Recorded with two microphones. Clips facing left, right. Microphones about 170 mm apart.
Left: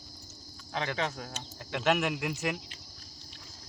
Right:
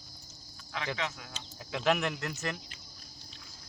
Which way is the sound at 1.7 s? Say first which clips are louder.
Left 1 dB; 5° left (ahead or behind).